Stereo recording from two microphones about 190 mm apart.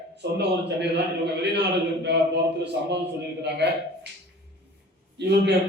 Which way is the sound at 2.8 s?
60° right (ahead or behind).